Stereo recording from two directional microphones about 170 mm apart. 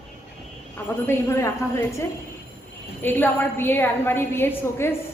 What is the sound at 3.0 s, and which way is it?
A woman's voice, 10° left (ahead or behind).